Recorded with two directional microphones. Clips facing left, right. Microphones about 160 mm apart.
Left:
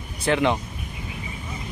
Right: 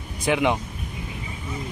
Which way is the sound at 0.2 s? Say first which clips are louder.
Even; 10° right (ahead or behind).